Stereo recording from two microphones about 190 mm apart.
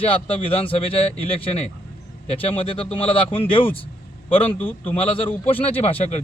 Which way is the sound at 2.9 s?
25° left (ahead or behind).